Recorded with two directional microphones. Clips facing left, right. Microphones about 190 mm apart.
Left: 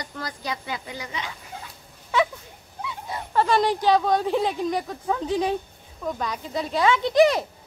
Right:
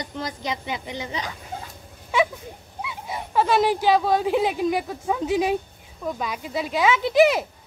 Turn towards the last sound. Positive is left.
turn(degrees=-5)  # may be behind; listen again after turning